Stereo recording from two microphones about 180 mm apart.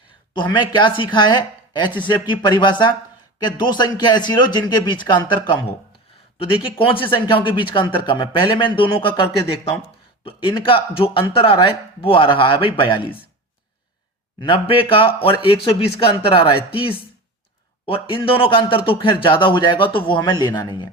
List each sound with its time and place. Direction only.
0.3 s speech: 25° left (ahead or behind)
14.4 s speech: 30° left (ahead or behind)